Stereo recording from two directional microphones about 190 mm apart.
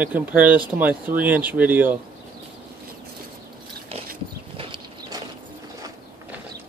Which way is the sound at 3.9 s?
30° right (ahead or behind).